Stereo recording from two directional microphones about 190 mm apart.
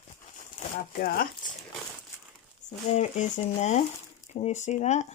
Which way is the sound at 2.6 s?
40° left (ahead or behind).